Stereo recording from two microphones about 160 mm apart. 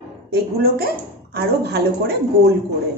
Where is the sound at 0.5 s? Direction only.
75° right (ahead or behind).